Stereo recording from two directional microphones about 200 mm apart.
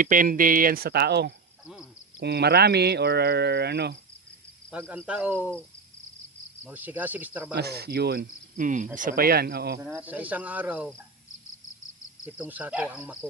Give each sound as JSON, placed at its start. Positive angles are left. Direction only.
{"t": 0.0, "sound": "speech", "side_deg": -45}
{"t": 1.6, "sound": "a sound", "side_deg": -5}
{"t": 2.1, "sound": "speech", "side_deg": -55}
{"t": 4.7, "sound": "speech", "side_deg": -10}
{"t": 6.7, "sound": "speech", "side_deg": -10}
{"t": 7.5, "sound": "speech", "side_deg": -55}
{"t": 9.8, "sound": "speech", "side_deg": -10}
{"t": 12.2, "sound": "speech", "side_deg": -10}